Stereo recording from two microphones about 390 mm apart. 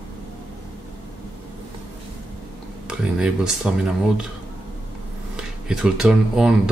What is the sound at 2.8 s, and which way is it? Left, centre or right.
Speech, centre.